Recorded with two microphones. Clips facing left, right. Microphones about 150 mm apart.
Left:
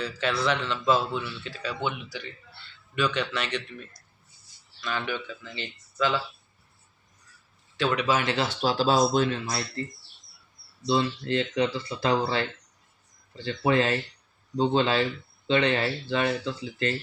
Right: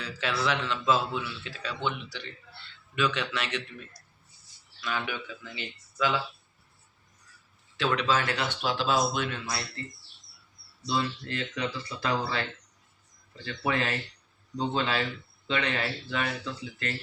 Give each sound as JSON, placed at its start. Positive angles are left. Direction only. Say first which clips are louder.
{"t": 0.0, "sound": "a man's voice", "louder": "left 3 dB", "side_deg": 0}
{"t": 4.8, "sound": "a man's voice", "louder": "left 2 dB", "side_deg": -5}
{"t": 7.8, "sound": "speech", "louder": "left 2 dB", "side_deg": 5}
{"t": 8.3, "sound": "speech", "louder": "left 4 dB", "side_deg": 30}
{"t": 10.8, "sound": "speech", "louder": "left 5 dB", "side_deg": 30}